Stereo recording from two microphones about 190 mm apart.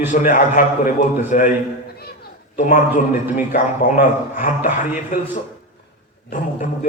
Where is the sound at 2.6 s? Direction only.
40° left (ahead or behind).